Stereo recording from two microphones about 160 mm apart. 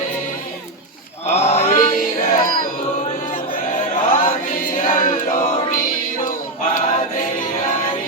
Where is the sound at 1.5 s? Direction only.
55° left (ahead or behind).